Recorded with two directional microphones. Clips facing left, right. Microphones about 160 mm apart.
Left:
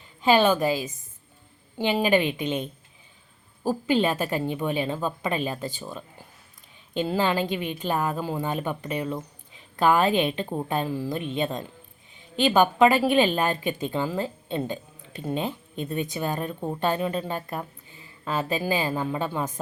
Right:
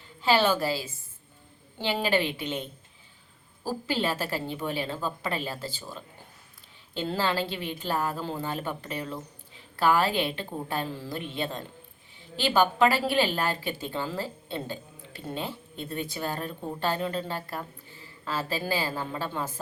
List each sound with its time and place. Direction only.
0.2 s a woman's voice: 15° left (ahead or behind)